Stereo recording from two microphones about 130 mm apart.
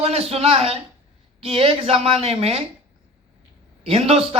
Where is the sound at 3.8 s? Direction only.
50° right (ahead or behind).